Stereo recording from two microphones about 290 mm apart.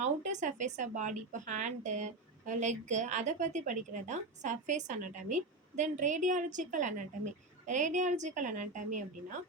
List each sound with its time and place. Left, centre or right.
0.0 s speech: right